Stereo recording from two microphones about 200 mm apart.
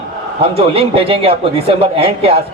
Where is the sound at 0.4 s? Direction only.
30° right (ahead or behind).